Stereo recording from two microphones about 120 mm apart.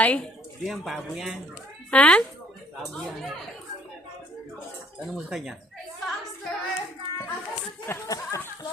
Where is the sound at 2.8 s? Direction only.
Centre (ahead or behind).